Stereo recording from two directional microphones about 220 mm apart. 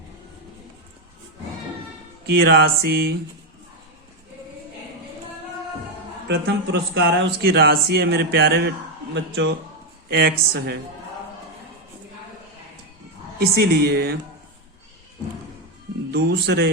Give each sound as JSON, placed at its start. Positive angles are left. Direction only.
{"t": 2.3, "sound": "speech", "side_deg": -45}
{"t": 6.2, "sound": "speech", "side_deg": -50}
{"t": 10.1, "sound": "speech", "side_deg": -45}
{"t": 13.4, "sound": "speech", "side_deg": -45}
{"t": 16.1, "sound": "speech", "side_deg": -50}